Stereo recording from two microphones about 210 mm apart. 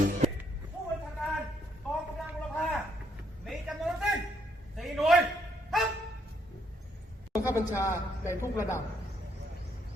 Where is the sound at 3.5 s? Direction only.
Centre (ahead or behind).